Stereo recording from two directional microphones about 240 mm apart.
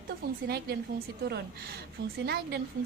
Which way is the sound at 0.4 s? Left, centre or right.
Right.